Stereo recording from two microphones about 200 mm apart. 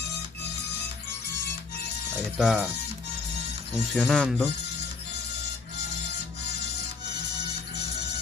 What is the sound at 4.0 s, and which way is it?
Speech, centre (ahead or behind).